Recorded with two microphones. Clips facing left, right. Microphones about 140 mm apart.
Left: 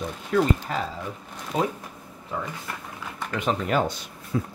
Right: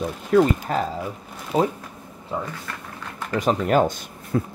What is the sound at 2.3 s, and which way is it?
Speech, 25° right (ahead or behind).